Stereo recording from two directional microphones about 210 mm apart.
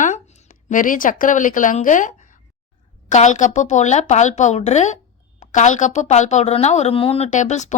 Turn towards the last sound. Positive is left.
turn(degrees=35)  # may be behind; listen again after turning